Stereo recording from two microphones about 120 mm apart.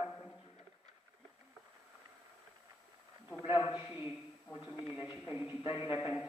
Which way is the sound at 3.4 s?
35° left (ahead or behind).